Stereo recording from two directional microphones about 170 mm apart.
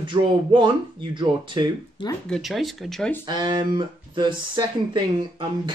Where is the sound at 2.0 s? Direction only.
30° left (ahead or behind).